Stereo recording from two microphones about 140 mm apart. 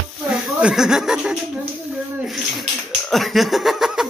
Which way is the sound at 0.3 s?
5° right (ahead or behind).